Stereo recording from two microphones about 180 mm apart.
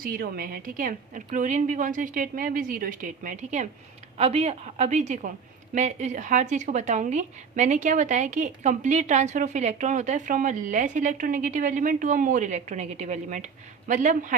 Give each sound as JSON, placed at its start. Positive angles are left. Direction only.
{"t": 0.0, "sound": "a woman's voice", "side_deg": -55}